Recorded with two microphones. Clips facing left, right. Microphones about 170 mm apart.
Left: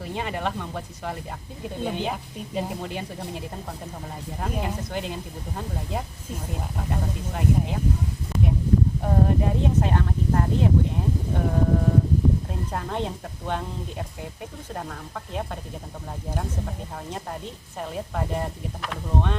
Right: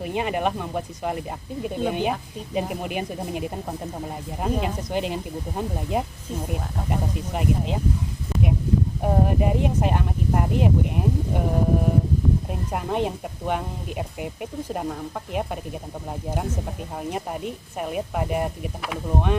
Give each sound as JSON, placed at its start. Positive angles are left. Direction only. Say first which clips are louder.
{"t": 0.0, "sound": "speech", "louder": "right 5 dB", "side_deg": -20}
{"t": 9.0, "sound": "speech", "louder": "right 1 dB", "side_deg": -15}
{"t": 17.1, "sound": "speech", "louder": "right 7 dB", "side_deg": -15}